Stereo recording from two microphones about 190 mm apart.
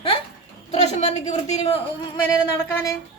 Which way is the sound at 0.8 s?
35° left (ahead or behind).